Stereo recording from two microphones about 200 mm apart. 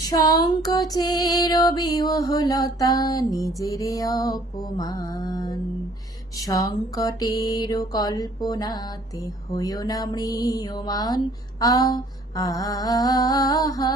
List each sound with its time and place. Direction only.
0.1 s mantra: 20° left (ahead or behind)